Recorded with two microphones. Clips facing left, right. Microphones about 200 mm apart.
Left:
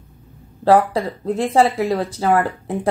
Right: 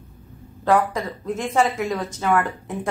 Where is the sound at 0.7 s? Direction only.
30° left (ahead or behind).